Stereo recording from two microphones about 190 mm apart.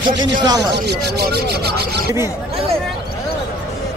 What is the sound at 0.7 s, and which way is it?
Speech, 60° right (ahead or behind).